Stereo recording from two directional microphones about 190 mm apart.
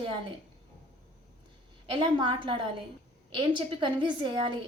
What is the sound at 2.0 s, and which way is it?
A woman's voice, 25° right (ahead or behind).